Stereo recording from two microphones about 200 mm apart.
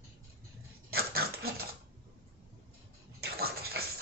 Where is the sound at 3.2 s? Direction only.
50° right (ahead or behind).